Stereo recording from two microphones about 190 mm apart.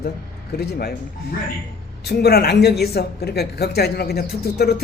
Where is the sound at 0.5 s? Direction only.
55° left (ahead or behind).